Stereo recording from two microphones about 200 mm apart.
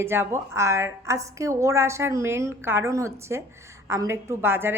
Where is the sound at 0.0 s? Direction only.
10° right (ahead or behind).